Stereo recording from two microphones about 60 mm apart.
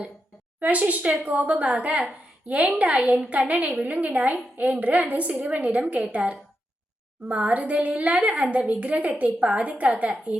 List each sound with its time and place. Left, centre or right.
0.6 s a woman's voice: right